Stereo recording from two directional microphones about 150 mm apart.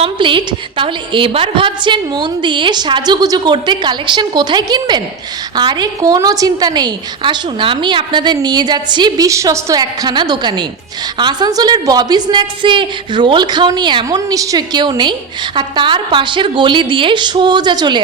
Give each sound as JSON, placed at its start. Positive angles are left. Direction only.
{"t": 0.0, "sound": "a woman's voice", "side_deg": -35}